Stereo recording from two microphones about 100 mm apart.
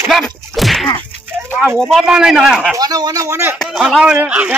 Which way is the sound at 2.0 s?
5° right (ahead or behind).